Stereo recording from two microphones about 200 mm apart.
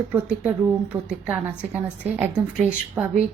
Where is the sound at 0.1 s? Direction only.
10° right (ahead or behind).